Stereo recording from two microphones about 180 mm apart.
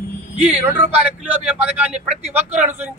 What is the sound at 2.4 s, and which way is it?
Speech, 40° right (ahead or behind).